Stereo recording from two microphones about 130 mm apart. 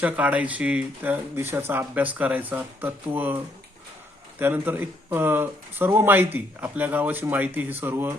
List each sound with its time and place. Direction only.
0.0 s speech: 10° right (ahead or behind)